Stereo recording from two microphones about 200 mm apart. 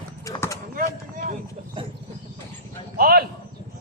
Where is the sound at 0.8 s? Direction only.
40° right (ahead or behind).